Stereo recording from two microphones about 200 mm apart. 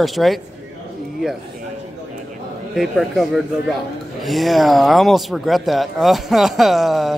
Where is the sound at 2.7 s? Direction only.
Centre (ahead or behind).